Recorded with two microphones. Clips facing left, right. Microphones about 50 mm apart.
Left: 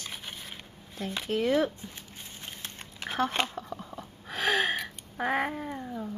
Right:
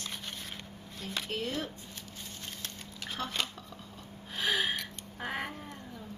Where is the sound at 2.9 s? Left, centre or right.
Left.